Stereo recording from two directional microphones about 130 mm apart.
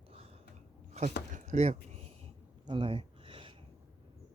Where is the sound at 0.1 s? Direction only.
50° right (ahead or behind).